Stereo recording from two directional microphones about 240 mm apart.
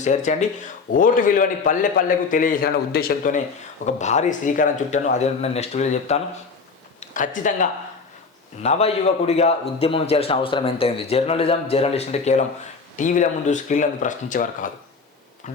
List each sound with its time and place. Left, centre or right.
0.0 s a man's voice: left